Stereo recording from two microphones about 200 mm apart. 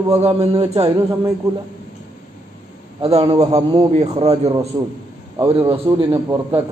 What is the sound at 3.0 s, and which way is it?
A man's voice, 30° right (ahead or behind).